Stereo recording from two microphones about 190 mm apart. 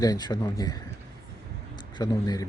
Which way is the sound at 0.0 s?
20° left (ahead or behind).